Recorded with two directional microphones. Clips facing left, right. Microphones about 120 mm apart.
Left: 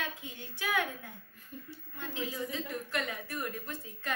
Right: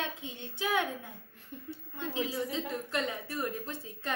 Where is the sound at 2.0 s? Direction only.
30° right (ahead or behind).